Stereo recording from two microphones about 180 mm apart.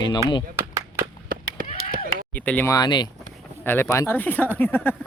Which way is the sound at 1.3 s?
50° right (ahead or behind).